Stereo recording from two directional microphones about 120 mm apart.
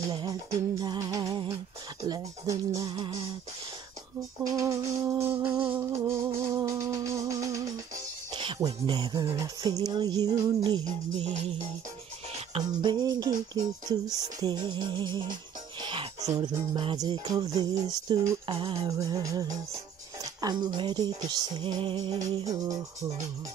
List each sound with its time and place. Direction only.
0.1 s music: 35° right (ahead or behind)
4.5 s music: 30° right (ahead or behind)
8.9 s music: 35° right (ahead or behind)
12.5 s music: 40° right (ahead or behind)
18.5 s music: 50° right (ahead or behind)
18.9 s music: 30° right (ahead or behind)